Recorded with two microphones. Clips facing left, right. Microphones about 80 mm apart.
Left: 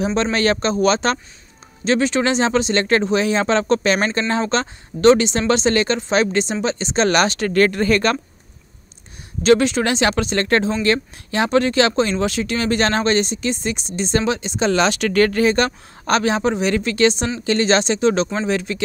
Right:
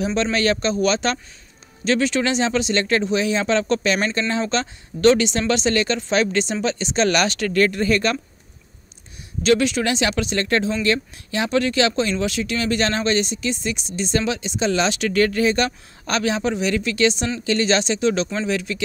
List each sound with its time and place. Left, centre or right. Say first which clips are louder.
0.0 s speech: left 2 dB; left
7.5 s speech: left 3 dB; left
9.4 s speech: left 3 dB; left